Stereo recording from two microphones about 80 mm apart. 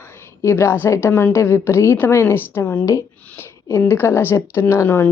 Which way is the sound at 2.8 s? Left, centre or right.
Left.